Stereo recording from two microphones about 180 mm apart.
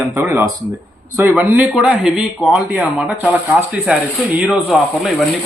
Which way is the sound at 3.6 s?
5° right (ahead or behind).